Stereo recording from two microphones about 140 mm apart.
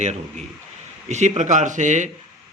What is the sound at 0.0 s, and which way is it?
A man's voice, 55° right (ahead or behind).